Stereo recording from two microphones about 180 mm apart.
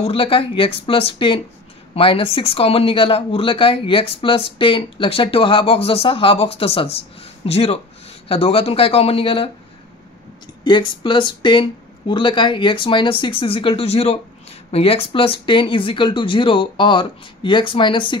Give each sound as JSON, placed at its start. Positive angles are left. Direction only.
{"t": 0.0, "sound": "speech", "side_deg": 30}
{"t": 10.6, "sound": "speech", "side_deg": 25}